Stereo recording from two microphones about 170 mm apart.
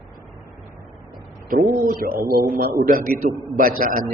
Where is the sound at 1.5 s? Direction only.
55° right (ahead or behind).